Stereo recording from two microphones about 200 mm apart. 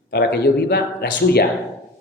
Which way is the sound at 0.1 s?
55° left (ahead or behind).